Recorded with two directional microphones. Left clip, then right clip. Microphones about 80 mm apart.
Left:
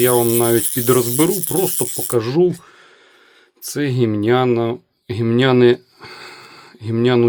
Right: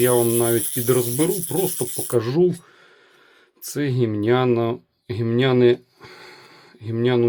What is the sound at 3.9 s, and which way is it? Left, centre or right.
Speech, left.